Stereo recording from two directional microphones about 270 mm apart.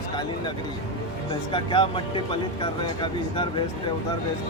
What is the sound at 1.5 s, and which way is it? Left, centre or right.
Speech, centre.